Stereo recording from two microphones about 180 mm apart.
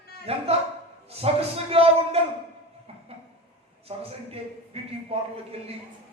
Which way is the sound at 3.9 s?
35° right (ahead or behind).